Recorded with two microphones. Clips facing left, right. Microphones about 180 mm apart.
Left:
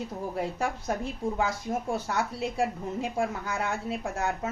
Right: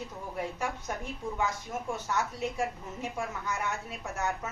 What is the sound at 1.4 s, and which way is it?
A woman's voice, 35° left (ahead or behind).